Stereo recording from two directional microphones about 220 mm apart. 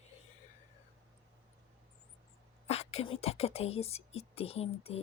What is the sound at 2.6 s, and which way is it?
Speech, 30° left (ahead or behind).